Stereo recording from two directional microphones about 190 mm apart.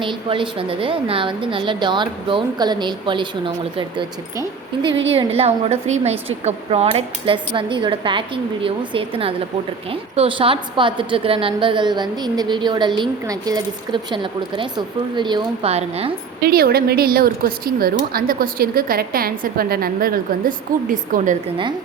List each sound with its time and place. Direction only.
0.0 s a woman's voice: 25° right (ahead or behind)
16.4 s speech: 55° right (ahead or behind)